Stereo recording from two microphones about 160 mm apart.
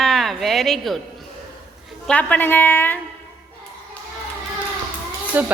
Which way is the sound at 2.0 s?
10° left (ahead or behind).